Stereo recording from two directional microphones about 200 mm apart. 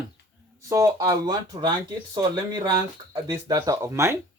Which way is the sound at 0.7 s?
15° right (ahead or behind).